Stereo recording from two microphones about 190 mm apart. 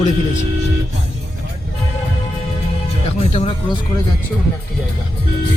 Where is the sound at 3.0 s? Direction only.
35° left (ahead or behind).